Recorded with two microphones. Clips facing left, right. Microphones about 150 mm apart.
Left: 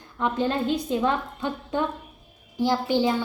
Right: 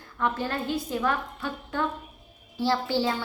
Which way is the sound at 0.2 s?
20° left (ahead or behind).